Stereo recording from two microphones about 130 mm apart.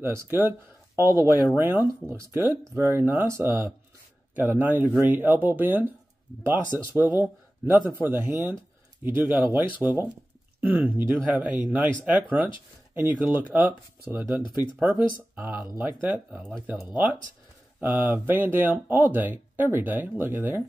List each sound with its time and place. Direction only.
0.0 s speech: 20° right (ahead or behind)
16.3 s speech: centre (ahead or behind)
16.6 s speech: 10° right (ahead or behind)